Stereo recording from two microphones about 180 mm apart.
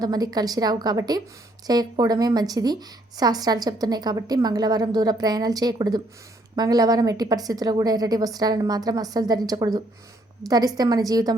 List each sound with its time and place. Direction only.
0.0 s a woman's voice: 20° right (ahead or behind)